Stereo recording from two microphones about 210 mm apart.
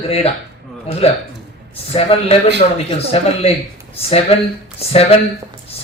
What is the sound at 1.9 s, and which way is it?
A man's voice, 30° left (ahead or behind).